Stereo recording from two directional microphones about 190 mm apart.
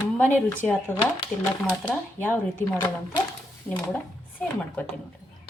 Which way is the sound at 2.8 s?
25° left (ahead or behind).